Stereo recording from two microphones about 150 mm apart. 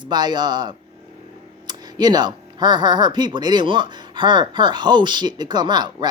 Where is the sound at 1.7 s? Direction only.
30° right (ahead or behind).